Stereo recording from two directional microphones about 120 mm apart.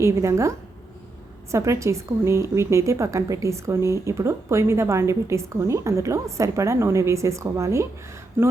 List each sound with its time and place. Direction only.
0.0 s a woman's voice: 25° right (ahead or behind)